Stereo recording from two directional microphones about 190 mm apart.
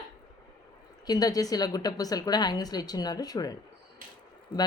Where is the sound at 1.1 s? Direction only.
20° left (ahead or behind).